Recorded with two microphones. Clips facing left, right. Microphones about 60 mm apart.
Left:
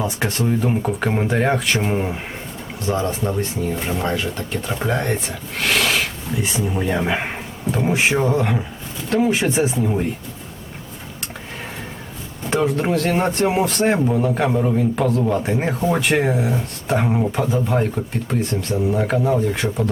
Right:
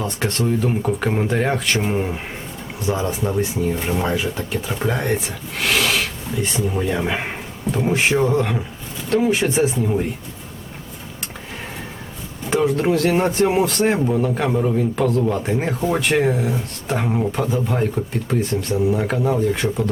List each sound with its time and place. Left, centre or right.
0.0 s speech: centre
2.8 s a man's voice: centre
12.5 s speech: centre